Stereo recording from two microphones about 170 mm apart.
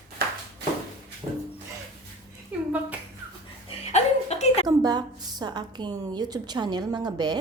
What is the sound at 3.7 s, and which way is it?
Chuckle, 40° left (ahead or behind).